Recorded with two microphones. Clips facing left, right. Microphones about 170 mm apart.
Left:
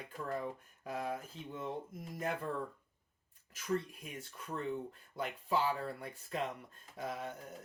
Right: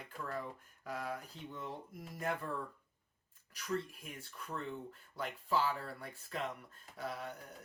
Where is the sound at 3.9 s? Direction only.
20° left (ahead or behind).